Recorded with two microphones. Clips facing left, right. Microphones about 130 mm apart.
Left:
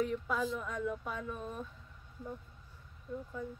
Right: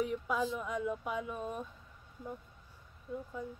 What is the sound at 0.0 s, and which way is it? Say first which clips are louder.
Speech: even; 10° right (ahead or behind).